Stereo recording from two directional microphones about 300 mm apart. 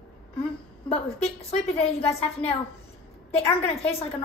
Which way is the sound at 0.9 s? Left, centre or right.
Centre.